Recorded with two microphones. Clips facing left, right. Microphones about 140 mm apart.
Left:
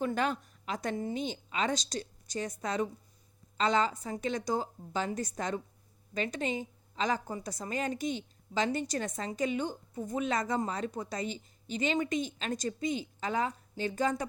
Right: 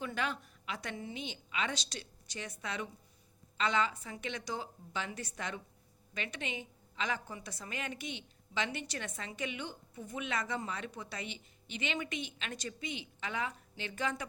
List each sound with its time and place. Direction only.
0.0 s a woman's voice: 45° left (ahead or behind)